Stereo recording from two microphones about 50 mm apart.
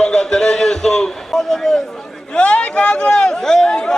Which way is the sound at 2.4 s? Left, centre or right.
Left.